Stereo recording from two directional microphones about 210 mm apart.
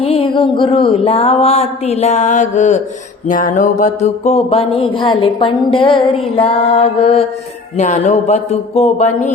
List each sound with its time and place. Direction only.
0.0 s mantra: 25° left (ahead or behind)
7.8 s speech: 35° left (ahead or behind)